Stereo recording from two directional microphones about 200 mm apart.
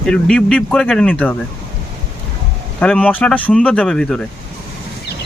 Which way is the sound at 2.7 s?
5° left (ahead or behind).